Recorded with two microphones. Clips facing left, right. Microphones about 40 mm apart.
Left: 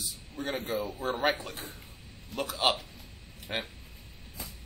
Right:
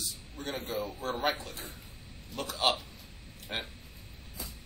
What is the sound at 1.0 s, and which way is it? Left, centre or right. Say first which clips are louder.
Speech: left 3 dB; centre.